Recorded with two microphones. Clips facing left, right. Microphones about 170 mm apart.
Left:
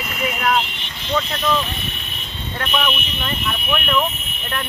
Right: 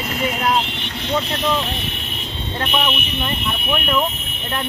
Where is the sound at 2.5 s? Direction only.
20° right (ahead or behind).